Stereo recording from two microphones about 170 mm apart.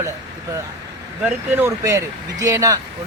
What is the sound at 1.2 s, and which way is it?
Speech, 15° right (ahead or behind).